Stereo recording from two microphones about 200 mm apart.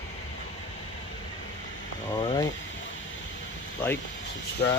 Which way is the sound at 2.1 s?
20° left (ahead or behind).